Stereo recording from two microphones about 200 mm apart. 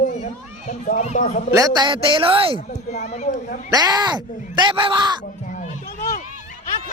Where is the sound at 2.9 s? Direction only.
35° left (ahead or behind).